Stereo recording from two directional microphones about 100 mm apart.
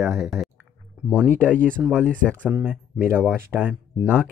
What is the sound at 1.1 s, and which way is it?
Speech, 15° right (ahead or behind).